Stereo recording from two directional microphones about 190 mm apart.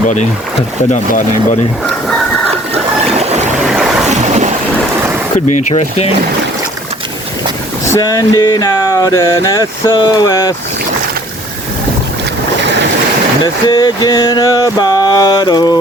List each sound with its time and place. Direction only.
0.9 s speech: 40° left (ahead or behind)
2.7 s trickle: 35° right (ahead or behind)
4.1 s boat: 40° right (ahead or behind)
5.5 s speech: 35° left (ahead or behind)
7.9 s a sound: 20° left (ahead or behind)
13.4 s a sound: 25° left (ahead or behind)